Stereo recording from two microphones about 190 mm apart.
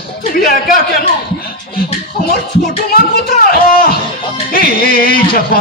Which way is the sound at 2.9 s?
50° left (ahead or behind).